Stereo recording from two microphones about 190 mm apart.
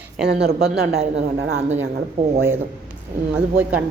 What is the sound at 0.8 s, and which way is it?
Speech, 60° right (ahead or behind).